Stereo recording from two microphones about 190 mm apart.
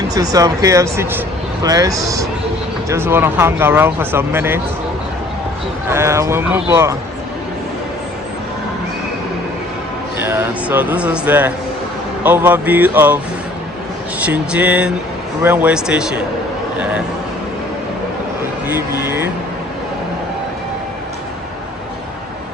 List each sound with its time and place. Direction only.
0.1 s speech: 20° right (ahead or behind)
5.9 s speech: 15° right (ahead or behind)
10.2 s speech: 10° right (ahead or behind)
14.3 s a man's voice: 5° right (ahead or behind)
18.7 s speech: 10° right (ahead or behind)